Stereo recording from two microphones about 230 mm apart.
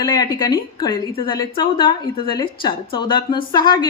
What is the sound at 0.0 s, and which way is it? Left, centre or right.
A woman's voice, centre.